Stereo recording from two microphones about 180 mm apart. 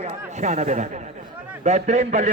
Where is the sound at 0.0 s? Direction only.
40° right (ahead or behind).